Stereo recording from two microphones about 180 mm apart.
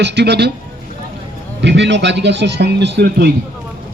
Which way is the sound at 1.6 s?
75° right (ahead or behind).